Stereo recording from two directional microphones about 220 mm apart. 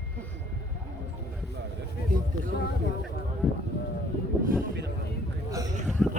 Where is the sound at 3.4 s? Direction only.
5° left (ahead or behind).